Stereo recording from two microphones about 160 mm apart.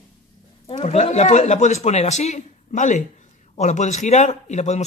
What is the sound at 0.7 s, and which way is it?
Speech, 45° left (ahead or behind).